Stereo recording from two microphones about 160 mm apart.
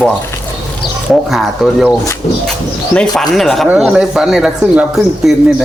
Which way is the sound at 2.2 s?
45° left (ahead or behind).